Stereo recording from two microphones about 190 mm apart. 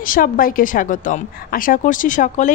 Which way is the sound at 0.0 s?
45° left (ahead or behind).